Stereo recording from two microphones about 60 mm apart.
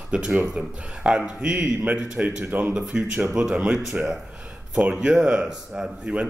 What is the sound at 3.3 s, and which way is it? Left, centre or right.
Speech, centre.